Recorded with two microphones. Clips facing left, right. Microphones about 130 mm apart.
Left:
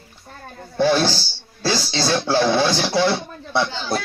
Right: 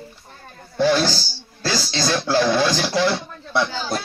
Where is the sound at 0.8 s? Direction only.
15° left (ahead or behind).